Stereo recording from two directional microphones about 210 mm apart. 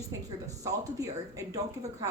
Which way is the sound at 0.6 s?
15° right (ahead or behind).